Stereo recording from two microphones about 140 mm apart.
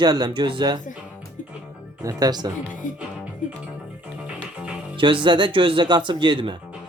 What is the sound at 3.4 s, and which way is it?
Music, 65° left (ahead or behind).